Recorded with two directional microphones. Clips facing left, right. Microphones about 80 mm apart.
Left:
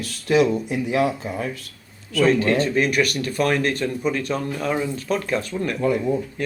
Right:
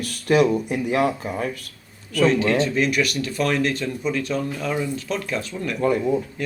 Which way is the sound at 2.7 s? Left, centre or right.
Left.